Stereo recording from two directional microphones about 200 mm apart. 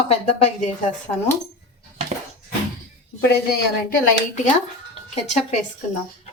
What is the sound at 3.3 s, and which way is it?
A woman's voice, 50° left (ahead or behind).